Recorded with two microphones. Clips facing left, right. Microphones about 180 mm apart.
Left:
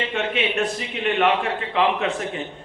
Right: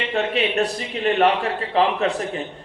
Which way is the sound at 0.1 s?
35° right (ahead or behind).